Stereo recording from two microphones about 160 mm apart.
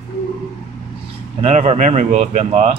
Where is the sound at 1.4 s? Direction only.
45° right (ahead or behind).